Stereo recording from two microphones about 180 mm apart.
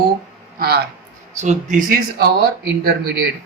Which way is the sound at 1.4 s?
40° right (ahead or behind).